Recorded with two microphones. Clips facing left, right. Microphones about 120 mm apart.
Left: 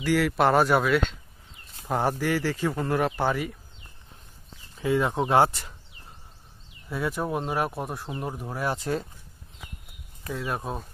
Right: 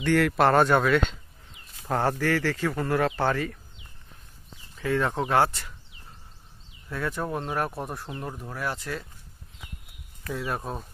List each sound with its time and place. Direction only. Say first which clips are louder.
0.0 s speech: right 1 dB; 5° left (ahead or behind)
1.9 s speech: even; 15° left (ahead or behind)
4.7 s speech: left 2 dB; 15° left (ahead or behind)
6.9 s speech: left 2 dB; 10° left (ahead or behind)
8.1 s speech: left 3 dB; 15° left (ahead or behind)
10.3 s speech: even; centre (ahead or behind)